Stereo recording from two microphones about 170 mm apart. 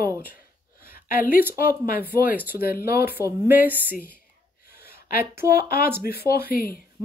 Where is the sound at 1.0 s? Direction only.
60° left (ahead or behind).